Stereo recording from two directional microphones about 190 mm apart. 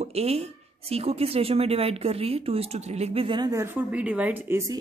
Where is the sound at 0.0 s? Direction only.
35° right (ahead or behind).